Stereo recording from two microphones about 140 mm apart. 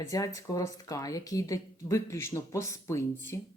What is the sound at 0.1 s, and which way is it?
Speech, 25° left (ahead or behind).